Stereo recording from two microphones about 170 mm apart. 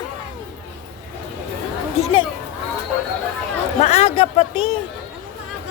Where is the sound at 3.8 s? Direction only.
40° left (ahead or behind).